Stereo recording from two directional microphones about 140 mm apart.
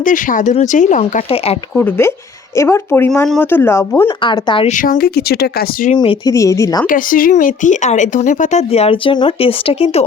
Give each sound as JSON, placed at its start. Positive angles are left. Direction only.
{"t": 0.0, "sound": "speech", "side_deg": 70}
{"t": 1.7, "sound": "speech", "side_deg": 15}
{"t": 4.2, "sound": "speech", "side_deg": 35}
{"t": 4.6, "sound": "speech", "side_deg": 65}
{"t": 6.0, "sound": "speech", "side_deg": 30}
{"t": 6.8, "sound": "speech", "side_deg": 75}